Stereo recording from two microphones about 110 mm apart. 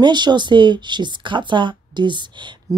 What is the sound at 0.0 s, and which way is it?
Speech, 45° right (ahead or behind).